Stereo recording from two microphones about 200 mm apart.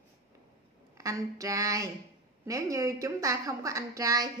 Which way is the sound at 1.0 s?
15° right (ahead or behind).